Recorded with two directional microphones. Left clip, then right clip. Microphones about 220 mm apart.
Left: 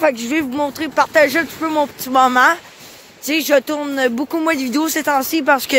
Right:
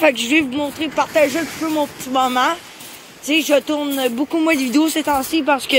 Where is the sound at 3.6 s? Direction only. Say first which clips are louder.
Right 1 dB; 30° left (ahead or behind).